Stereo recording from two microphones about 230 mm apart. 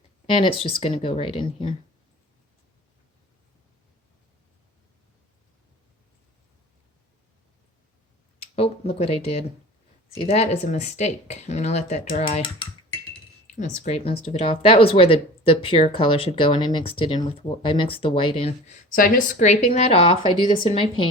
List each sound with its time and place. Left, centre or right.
0.3 s speech: left
8.5 s a sound: left
10.2 s speech: left
13.6 s speech: left